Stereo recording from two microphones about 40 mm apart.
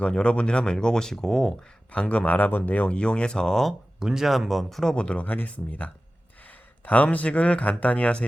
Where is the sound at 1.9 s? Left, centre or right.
Left.